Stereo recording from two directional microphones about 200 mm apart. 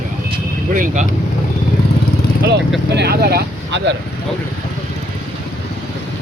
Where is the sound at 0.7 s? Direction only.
40° right (ahead or behind).